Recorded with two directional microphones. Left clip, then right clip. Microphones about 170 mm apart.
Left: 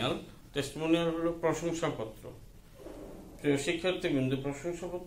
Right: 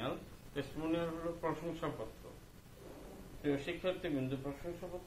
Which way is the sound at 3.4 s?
25° left (ahead or behind).